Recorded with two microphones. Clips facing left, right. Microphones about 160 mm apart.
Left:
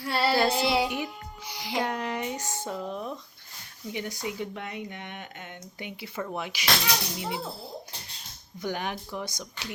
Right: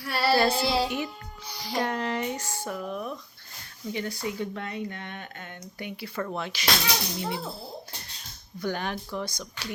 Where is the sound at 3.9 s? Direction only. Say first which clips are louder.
Right 2 dB; 15° left (ahead or behind).